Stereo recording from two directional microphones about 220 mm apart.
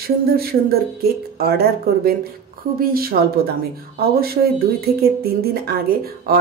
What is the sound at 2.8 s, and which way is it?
Speech, 40° right (ahead or behind).